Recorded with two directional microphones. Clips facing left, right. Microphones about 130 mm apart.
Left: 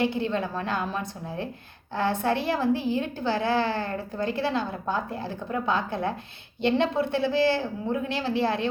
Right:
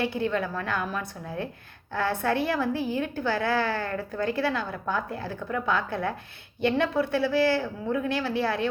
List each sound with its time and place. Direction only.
0.0 s a woman's voice: 20° left (ahead or behind)